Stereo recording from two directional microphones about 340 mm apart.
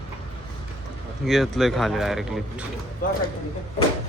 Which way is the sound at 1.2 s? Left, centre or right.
Centre.